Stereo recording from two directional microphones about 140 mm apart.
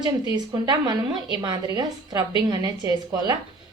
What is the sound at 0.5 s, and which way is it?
A woman's voice, 30° right (ahead or behind).